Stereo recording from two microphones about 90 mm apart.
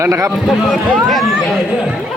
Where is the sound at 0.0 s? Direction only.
35° right (ahead or behind).